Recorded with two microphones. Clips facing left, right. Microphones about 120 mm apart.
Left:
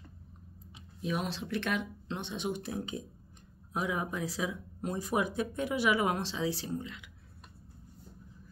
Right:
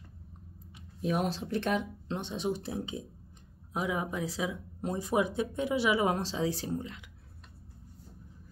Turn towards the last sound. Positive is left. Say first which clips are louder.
# right 2 dB
turn(degrees=-40)  # may be behind; listen again after turning